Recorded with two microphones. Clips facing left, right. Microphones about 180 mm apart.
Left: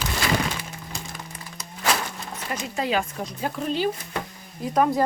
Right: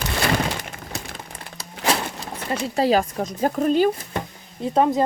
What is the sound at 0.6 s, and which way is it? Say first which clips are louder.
Crack: right 3 dB; 65° right (ahead or behind).